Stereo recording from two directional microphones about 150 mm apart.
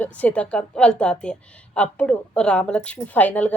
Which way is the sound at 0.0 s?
10° left (ahead or behind).